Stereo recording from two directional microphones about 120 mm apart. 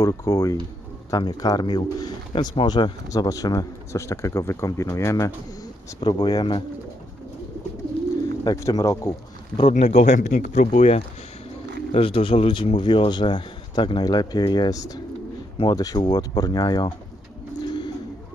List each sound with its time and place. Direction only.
0.0 s speech: 30° left (ahead or behind)
5.9 s speech: 40° left (ahead or behind)
8.5 s speech: 30° left (ahead or behind)
9.6 s speech: 65° left (ahead or behind)
11.9 s speech: 50° left (ahead or behind); by 16.9 s 35° left (ahead or behind)
17.6 s bird: 40° left (ahead or behind)